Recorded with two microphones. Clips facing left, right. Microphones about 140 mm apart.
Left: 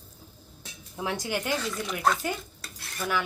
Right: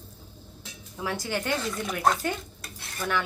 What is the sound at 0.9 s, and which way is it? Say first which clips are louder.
Speech: even; 20° left (ahead or behind).